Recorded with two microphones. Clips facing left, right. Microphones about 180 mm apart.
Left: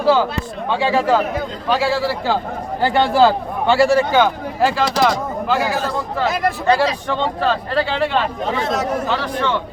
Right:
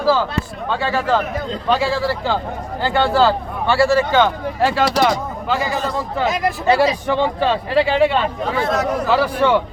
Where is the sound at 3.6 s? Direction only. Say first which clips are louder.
Left 1 dB; 20° left (ahead or behind).